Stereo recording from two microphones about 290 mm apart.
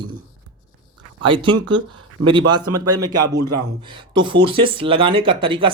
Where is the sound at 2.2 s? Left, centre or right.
Centre.